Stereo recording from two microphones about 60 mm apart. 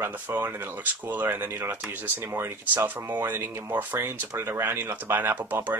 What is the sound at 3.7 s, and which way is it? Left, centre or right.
Speech, right.